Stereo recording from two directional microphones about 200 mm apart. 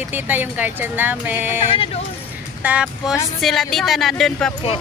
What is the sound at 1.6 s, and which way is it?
Speech, 30° left (ahead or behind).